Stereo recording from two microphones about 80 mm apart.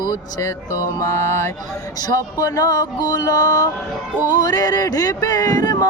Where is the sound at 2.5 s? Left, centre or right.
Left.